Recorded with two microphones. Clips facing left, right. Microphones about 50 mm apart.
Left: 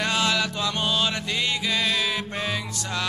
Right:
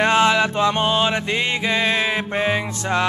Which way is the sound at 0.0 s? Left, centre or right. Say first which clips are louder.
Right 8 dB; right.